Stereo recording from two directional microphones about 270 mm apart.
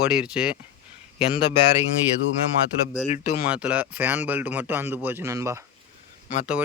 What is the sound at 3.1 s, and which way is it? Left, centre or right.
Speech, left.